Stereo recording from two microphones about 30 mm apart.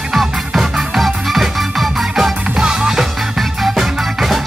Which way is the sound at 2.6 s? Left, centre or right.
Right.